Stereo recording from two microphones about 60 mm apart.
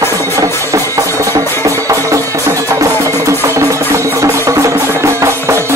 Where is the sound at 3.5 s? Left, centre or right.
Right.